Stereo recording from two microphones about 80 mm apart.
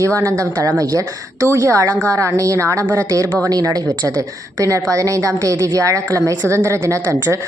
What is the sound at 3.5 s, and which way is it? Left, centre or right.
Speech, right.